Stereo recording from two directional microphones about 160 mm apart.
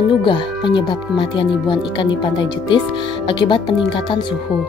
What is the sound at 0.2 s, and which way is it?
Speech, 30° left (ahead or behind).